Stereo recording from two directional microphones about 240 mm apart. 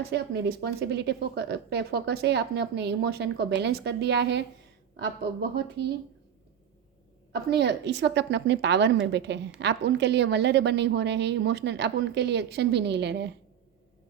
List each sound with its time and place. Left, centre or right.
0.1 s speech: right
7.5 s speech: right